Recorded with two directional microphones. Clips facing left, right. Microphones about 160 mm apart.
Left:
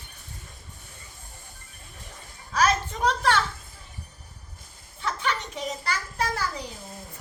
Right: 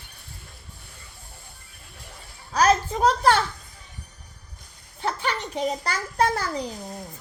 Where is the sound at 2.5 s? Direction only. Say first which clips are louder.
Right 4 dB; 40° right (ahead or behind).